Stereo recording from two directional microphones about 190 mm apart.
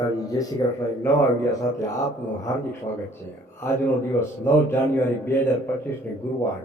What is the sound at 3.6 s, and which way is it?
Speech, 10° left (ahead or behind).